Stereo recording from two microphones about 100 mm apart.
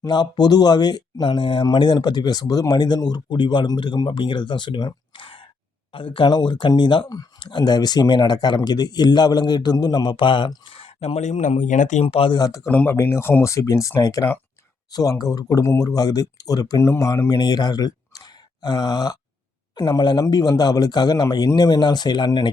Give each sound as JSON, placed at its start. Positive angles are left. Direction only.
{"t": 0.0, "sound": "speech", "side_deg": 45}
{"t": 5.1, "sound": "sigh", "side_deg": 60}
{"t": 5.9, "sound": "speech", "side_deg": 60}
{"t": 12.0, "sound": "speech", "side_deg": 70}
{"t": 12.3, "sound": "speech", "side_deg": 40}
{"t": 12.6, "sound": "speech", "side_deg": 20}